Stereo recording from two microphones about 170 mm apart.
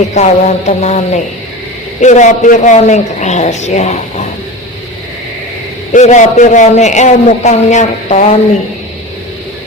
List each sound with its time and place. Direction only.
0.1 s a man's voice: 45° left (ahead or behind)
5.9 s a man's voice: 45° left (ahead or behind)